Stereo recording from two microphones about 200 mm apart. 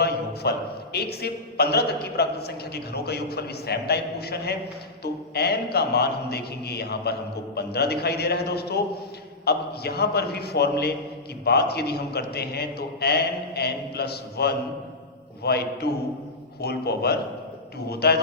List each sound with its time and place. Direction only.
0.4 s a man's voice: 55° left (ahead or behind)